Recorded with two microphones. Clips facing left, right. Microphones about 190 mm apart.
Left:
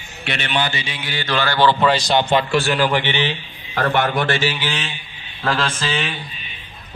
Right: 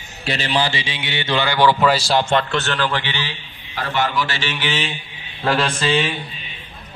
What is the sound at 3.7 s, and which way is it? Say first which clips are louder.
Mantra: left 3 dB; 55° left (ahead or behind).